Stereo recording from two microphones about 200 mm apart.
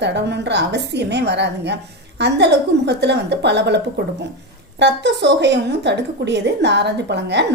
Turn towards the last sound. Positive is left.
turn(degrees=-60)  # may be behind; listen again after turning